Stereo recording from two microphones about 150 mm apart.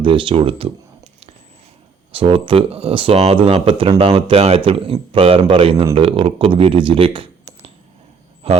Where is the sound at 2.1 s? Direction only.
35° right (ahead or behind).